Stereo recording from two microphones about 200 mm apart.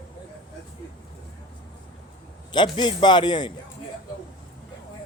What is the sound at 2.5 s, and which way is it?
A man's voice, 20° left (ahead or behind).